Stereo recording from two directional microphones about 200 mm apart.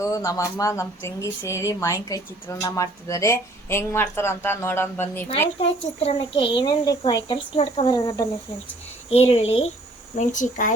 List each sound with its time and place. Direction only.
0.0 s speech: 15° left (ahead or behind)
6.0 s a child's voice: 30° left (ahead or behind)
9.0 s a child's voice: 30° left (ahead or behind)